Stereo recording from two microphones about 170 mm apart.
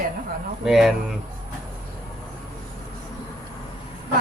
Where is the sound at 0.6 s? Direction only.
5° right (ahead or behind).